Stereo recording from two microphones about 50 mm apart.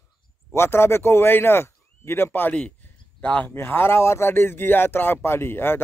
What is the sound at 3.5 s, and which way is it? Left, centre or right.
Speech, left.